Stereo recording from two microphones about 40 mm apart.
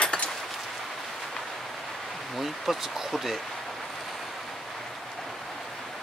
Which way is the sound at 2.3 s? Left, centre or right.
Centre.